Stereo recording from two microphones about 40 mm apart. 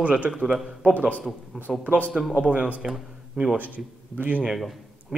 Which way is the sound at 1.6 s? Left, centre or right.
Centre.